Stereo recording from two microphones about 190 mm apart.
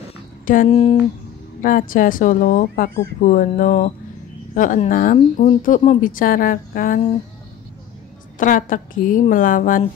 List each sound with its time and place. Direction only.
0.7 s speech: 30° left (ahead or behind)
1.6 s speech: 45° left (ahead or behind)
8.4 s speech: 45° left (ahead or behind)